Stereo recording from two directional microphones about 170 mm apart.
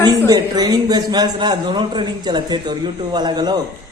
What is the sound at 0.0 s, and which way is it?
A man's voice, 25° right (ahead or behind).